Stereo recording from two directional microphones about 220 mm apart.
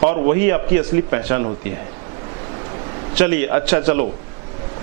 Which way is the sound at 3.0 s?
15° right (ahead or behind).